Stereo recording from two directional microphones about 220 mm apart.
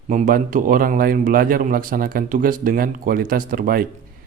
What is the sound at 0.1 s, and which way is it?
Speech, 35° right (ahead or behind).